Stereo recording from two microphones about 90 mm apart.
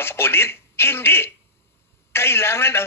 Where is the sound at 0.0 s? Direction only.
25° left (ahead or behind).